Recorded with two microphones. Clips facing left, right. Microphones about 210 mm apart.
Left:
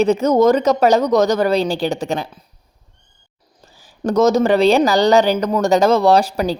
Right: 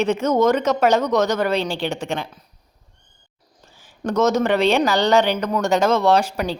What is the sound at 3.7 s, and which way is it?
A woman's voice, 35° left (ahead or behind).